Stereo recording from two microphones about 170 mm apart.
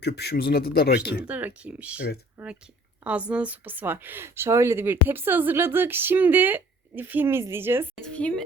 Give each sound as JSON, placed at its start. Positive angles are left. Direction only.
{"t": 0.0, "sound": "speech", "side_deg": 75}
{"t": 1.2, "sound": "speech", "side_deg": -10}
{"t": 7.9, "sound": "a woman's voice", "side_deg": 5}